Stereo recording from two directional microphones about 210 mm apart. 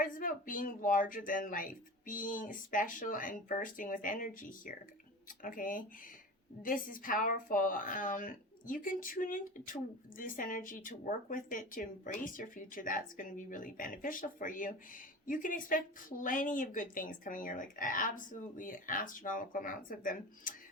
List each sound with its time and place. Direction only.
0.0 s a woman's voice: 40° left (ahead or behind)